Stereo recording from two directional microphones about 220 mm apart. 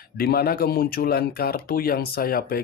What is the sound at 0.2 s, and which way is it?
Speech, 45° left (ahead or behind).